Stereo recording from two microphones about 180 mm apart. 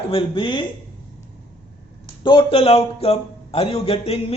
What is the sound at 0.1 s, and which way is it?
Speech, 30° left (ahead or behind).